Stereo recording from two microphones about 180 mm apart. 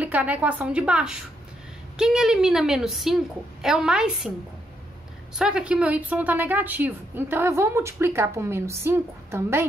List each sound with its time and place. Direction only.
0.0 s a woman's voice: 10° right (ahead or behind)
5.3 s a woman's voice: 5° right (ahead or behind)